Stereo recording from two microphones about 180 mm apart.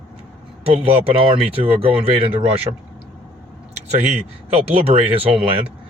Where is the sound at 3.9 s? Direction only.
40° right (ahead or behind).